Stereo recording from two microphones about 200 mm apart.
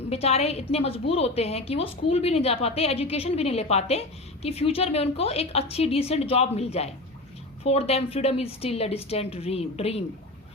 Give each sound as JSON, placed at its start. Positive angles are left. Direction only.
{"t": 0.1, "sound": "a woman's voice", "side_deg": 30}